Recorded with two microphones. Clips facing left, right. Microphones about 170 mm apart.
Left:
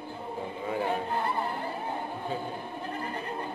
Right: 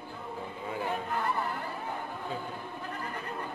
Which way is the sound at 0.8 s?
25° left (ahead or behind).